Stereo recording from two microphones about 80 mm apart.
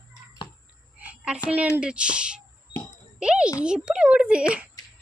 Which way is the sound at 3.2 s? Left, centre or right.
Centre.